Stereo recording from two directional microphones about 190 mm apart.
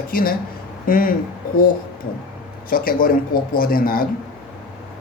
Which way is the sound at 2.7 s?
50° left (ahead or behind).